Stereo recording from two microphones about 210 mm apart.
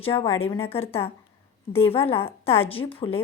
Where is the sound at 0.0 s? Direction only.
25° left (ahead or behind).